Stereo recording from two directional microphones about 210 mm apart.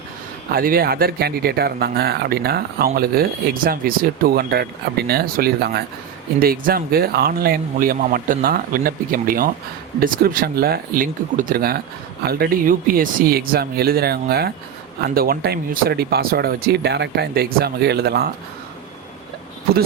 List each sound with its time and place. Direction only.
0.5 s speech: 45° right (ahead or behind)